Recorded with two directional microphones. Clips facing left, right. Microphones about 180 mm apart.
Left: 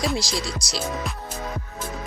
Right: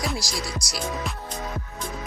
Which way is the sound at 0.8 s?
Centre (ahead or behind).